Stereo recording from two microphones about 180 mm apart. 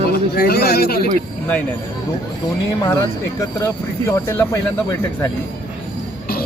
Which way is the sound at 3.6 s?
15° left (ahead or behind).